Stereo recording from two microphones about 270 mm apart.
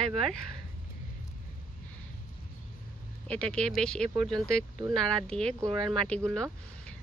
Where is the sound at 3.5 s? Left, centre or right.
Centre.